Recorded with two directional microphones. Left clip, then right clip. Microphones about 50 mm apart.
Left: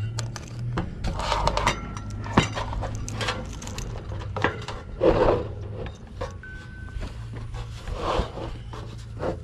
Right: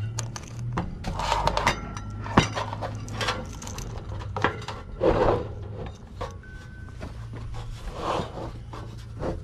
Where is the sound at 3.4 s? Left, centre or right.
Centre.